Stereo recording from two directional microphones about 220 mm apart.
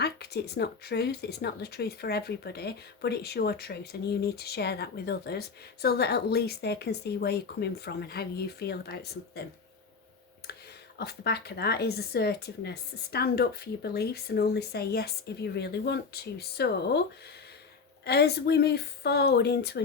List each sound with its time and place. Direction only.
0.0 s a woman's voice: 45° left (ahead or behind)
10.9 s a woman's voice: 45° left (ahead or behind)
18.0 s a woman's voice: 50° left (ahead or behind)